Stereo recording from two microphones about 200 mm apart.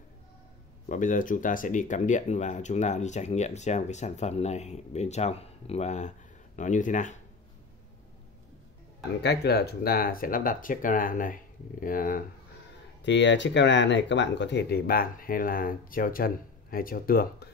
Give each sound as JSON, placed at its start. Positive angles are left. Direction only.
{"t": 0.8, "sound": "speech", "side_deg": 40}
{"t": 9.2, "sound": "speech", "side_deg": 55}
{"t": 13.0, "sound": "speech", "side_deg": 65}